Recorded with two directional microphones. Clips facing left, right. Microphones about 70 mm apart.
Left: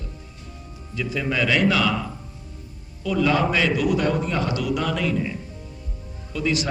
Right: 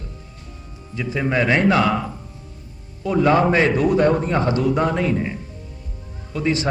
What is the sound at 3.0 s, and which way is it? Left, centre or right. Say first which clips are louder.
A man's voice: right 4 dB; right.